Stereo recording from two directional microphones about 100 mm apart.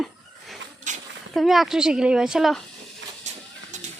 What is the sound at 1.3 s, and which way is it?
A woman's voice, centre (ahead or behind).